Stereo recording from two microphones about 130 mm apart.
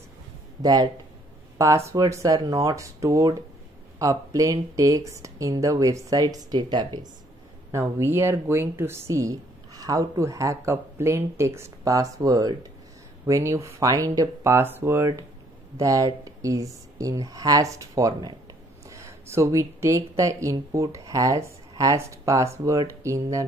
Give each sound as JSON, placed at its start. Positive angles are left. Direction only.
{"t": 0.6, "sound": "speech", "side_deg": -30}
{"t": 7.7, "sound": "speech", "side_deg": -20}